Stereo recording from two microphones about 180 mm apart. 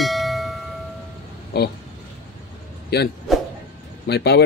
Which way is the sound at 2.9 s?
65° left (ahead or behind).